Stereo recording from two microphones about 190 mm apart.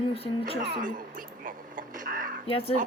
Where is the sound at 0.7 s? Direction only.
45° right (ahead or behind).